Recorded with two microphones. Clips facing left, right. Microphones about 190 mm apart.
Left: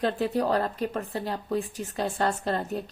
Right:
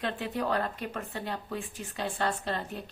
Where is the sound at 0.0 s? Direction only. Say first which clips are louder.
Left 6 dB; 40° left (ahead or behind).